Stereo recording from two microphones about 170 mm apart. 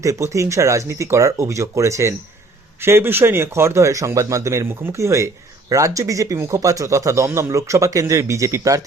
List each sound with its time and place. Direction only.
0.0 s speech: 20° right (ahead or behind)